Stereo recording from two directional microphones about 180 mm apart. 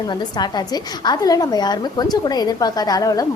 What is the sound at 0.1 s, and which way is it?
A woman's voice, 25° left (ahead or behind).